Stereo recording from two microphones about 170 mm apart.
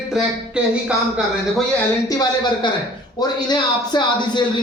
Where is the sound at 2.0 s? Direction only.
25° left (ahead or behind).